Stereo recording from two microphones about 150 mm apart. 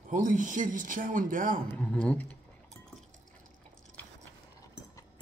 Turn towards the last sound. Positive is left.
turn(degrees=10)  # may be behind; listen again after turning